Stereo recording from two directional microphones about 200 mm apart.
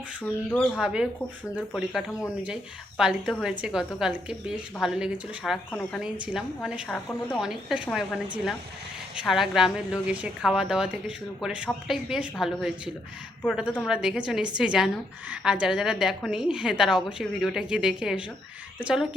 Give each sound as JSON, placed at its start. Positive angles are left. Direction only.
{"t": 0.2, "sound": "a woman's voice", "side_deg": 5}
{"t": 9.2, "sound": "a woman's voice", "side_deg": 0}